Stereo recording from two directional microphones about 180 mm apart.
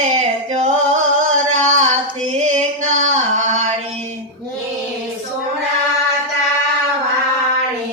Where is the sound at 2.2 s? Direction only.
35° right (ahead or behind).